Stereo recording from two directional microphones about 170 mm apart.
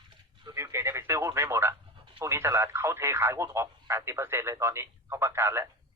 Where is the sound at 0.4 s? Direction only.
15° right (ahead or behind).